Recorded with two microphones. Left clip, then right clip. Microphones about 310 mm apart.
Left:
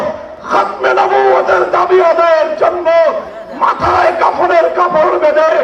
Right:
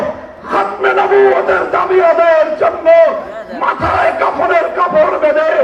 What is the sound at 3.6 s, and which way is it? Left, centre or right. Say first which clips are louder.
Battle cry: left 3 dB; left.